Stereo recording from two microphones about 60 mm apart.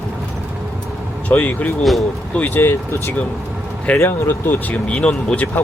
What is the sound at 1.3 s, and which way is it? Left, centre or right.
Speech, left.